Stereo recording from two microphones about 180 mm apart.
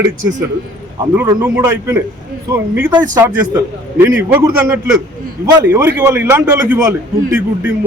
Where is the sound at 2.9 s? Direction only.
25° right (ahead or behind).